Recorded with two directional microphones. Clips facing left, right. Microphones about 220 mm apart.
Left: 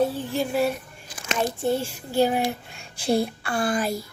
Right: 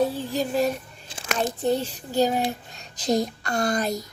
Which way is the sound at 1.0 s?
25° right (ahead or behind).